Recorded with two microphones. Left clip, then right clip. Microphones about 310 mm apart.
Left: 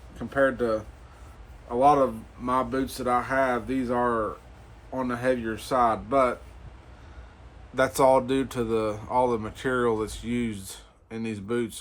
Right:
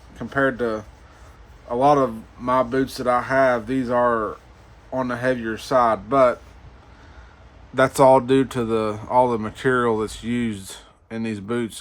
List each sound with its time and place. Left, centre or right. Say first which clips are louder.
0.2 s speech: right 2 dB; right
7.8 s speech: right 6 dB; right